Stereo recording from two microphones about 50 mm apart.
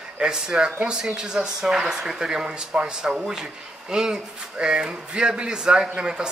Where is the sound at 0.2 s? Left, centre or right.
Centre.